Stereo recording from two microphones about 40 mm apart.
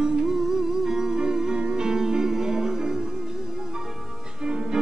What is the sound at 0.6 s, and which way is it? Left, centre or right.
Music, centre.